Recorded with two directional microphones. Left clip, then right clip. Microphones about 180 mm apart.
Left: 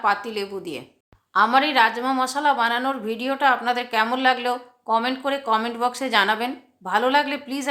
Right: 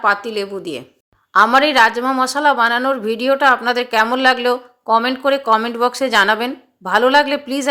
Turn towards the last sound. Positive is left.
turn(degrees=-25)  # may be behind; listen again after turning